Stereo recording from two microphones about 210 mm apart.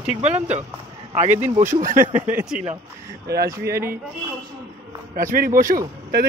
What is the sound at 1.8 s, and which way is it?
Speech, 40° right (ahead or behind).